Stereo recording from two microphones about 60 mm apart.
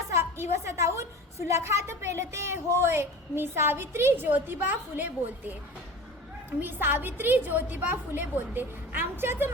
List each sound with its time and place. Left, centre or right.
0.1 s a woman's voice: right
6.6 s a woman's voice: right